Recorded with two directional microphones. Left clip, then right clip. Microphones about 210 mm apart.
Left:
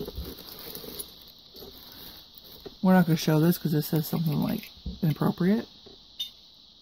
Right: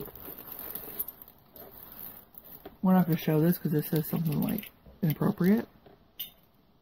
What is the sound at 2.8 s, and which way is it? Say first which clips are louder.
Speech: left 4 dB; 30° left (ahead or behind).